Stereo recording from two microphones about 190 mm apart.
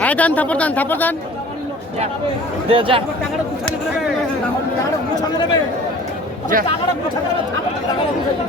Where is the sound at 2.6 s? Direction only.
30° right (ahead or behind).